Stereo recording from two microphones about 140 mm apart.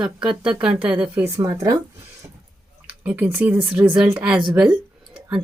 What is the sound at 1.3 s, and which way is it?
Speech, 25° right (ahead or behind).